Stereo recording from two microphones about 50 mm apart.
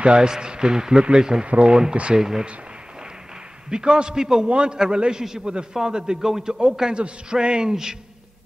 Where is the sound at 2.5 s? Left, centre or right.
Right.